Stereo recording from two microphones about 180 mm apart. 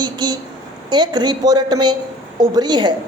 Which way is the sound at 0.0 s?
25° right (ahead or behind).